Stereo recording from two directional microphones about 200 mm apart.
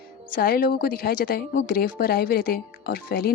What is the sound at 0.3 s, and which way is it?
A woman's voice, 50° left (ahead or behind).